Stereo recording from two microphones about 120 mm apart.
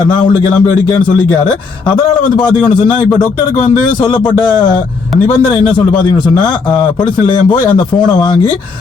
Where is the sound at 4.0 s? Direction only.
40° left (ahead or behind).